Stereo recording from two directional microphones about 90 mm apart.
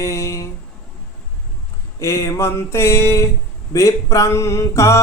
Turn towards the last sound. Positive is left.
turn(degrees=30)  # may be behind; listen again after turning